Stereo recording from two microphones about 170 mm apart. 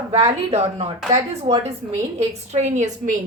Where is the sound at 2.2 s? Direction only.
40° right (ahead or behind).